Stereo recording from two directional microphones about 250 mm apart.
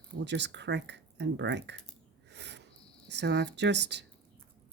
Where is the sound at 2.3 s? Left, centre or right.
Right.